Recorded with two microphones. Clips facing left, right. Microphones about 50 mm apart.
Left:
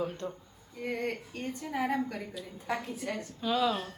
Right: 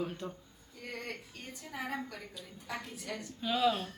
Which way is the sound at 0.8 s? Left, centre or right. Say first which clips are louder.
Left 9 dB; left.